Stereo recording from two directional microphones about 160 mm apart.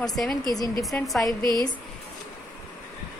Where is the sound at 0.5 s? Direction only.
20° left (ahead or behind).